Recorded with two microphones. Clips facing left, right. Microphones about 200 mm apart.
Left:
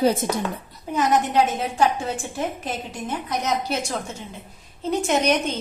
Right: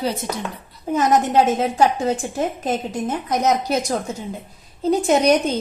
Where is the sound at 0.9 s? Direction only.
45° right (ahead or behind).